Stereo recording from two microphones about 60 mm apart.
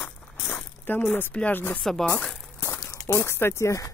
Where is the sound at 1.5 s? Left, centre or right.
Left.